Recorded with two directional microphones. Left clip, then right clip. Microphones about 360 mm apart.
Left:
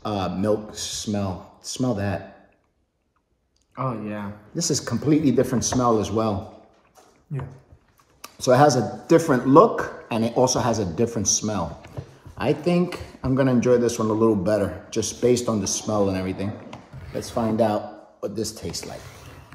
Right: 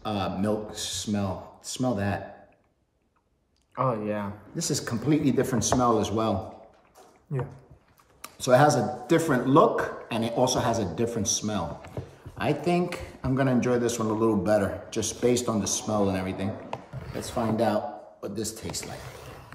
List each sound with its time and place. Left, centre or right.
0.0 s speech: centre
3.7 s speech: centre
4.6 s speech: centre
7.3 s speech: centre
8.2 s speech: centre
17.0 s a sound: centre
17.3 s speech: centre